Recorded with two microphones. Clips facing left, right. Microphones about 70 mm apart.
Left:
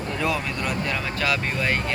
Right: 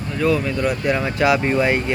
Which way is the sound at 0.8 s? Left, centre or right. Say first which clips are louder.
Right 10 dB; right.